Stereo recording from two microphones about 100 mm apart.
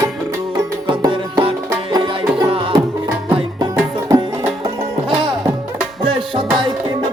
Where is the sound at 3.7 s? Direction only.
35° right (ahead or behind).